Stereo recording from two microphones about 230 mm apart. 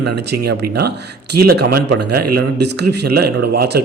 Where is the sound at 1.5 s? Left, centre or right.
Right.